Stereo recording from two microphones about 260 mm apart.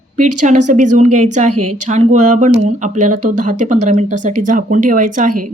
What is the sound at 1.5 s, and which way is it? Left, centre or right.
Speech, right.